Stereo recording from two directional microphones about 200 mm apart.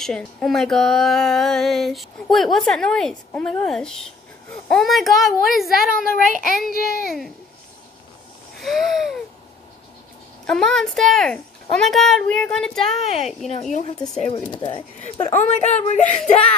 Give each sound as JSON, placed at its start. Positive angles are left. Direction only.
{"t": 0.0, "sound": "speech", "side_deg": 5}
{"t": 6.7, "sound": "a child's voice", "side_deg": 50}
{"t": 8.5, "sound": "speech", "side_deg": 0}
{"t": 10.4, "sound": "speech", "side_deg": 5}
{"t": 13.5, "sound": "speech", "side_deg": 35}
{"t": 15.0, "sound": "speech", "side_deg": 35}